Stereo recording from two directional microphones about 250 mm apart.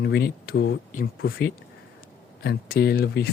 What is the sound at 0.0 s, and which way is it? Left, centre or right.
Speech, left.